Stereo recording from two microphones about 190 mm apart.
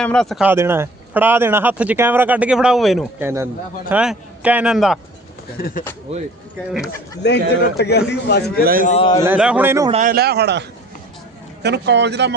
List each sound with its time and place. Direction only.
0.0 s speech: 5° left (ahead or behind)
0.4 s speech: 10° right (ahead or behind)
3.2 s speech: 10° right (ahead or behind)
5.5 s speech: 55° left (ahead or behind)
6.1 s speech: 35° right (ahead or behind)
7.2 s a man's voice: 65° left (ahead or behind)
8.6 s a man's voice: 50° right (ahead or behind)
8.9 s a man's voice: 25° left (ahead or behind)
9.2 s speech: 5° right (ahead or behind)
9.9 s speech: 45° right (ahead or behind); by 12.3 s 65° right (ahead or behind)